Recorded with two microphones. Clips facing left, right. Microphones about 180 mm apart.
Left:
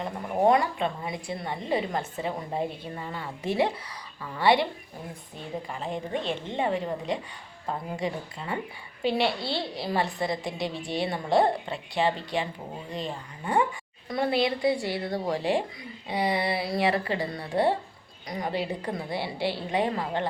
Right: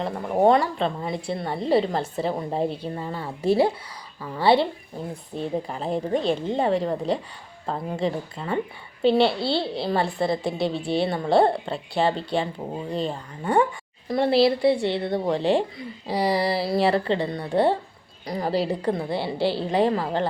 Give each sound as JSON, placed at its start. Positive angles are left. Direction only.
{"t": 0.0, "sound": "a child's voice", "side_deg": -30}